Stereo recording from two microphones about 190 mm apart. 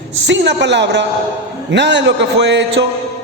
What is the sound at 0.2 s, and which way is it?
A man's voice, 70° right (ahead or behind).